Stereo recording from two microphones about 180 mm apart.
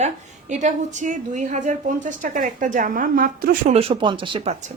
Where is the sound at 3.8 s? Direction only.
30° right (ahead or behind).